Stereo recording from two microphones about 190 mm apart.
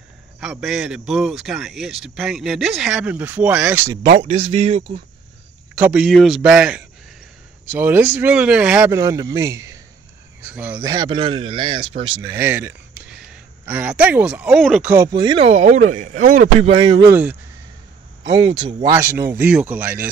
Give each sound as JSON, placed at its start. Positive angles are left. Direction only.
{"t": 0.4, "sound": "speech", "side_deg": 0}
{"t": 4.2, "sound": "speech", "side_deg": -30}
{"t": 5.8, "sound": "speech", "side_deg": -5}
{"t": 12.3, "sound": "speech", "side_deg": -10}
{"t": 15.0, "sound": "speech", "side_deg": -25}
{"t": 16.7, "sound": "speech", "side_deg": -25}
{"t": 17.0, "sound": "speech", "side_deg": -10}
{"t": 18.2, "sound": "speech", "side_deg": -25}
{"t": 18.9, "sound": "speech", "side_deg": -15}